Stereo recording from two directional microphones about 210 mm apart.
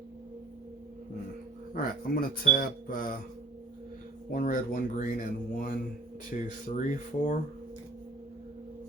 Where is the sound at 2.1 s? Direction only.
45° left (ahead or behind).